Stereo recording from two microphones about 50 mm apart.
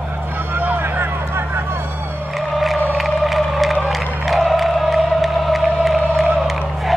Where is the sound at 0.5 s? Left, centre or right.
Right.